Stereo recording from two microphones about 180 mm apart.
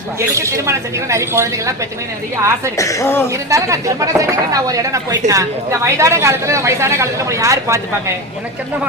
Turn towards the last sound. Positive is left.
turn(degrees=-15)  # may be behind; listen again after turning